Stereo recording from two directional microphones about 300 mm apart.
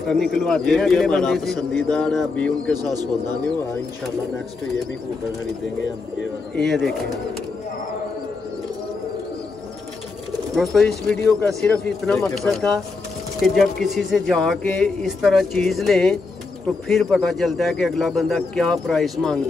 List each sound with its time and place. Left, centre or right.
0.0 s speech: centre
2.7 s a man's voice: centre
6.5 s speech: centre
10.5 s speech: centre